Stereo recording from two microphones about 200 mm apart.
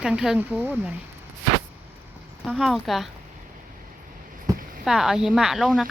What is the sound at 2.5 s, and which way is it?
Speech, centre (ahead or behind).